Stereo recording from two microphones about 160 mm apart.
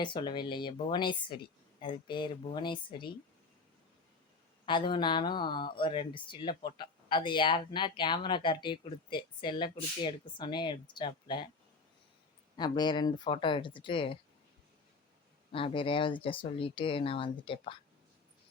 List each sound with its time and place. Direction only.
0.0 s speech: 30° left (ahead or behind)
4.6 s speech: 30° left (ahead or behind)
12.5 s speech: 25° left (ahead or behind)
15.5 s speech: 35° left (ahead or behind)